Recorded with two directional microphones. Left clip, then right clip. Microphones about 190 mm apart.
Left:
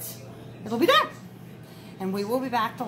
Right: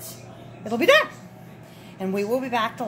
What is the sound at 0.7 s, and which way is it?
A woman's voice, 40° right (ahead or behind).